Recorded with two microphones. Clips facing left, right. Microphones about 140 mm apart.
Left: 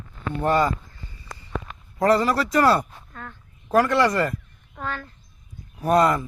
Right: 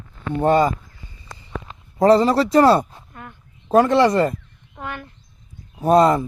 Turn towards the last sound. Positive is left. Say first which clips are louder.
# right 4 dB
turn(degrees=-25)  # may be behind; listen again after turning